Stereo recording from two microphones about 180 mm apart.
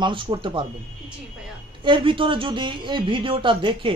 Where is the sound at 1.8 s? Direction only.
25° right (ahead or behind).